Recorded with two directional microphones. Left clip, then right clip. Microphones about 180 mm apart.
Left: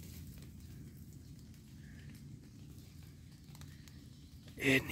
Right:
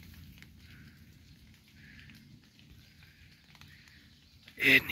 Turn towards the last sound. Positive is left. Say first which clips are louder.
# right 8 dB
turn(degrees=15)  # may be behind; listen again after turning